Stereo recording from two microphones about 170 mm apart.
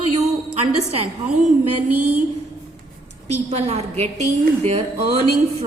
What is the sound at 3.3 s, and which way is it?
Speech, 40° right (ahead or behind).